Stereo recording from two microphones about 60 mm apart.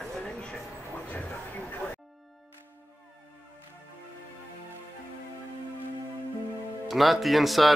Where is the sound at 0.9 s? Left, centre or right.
Left.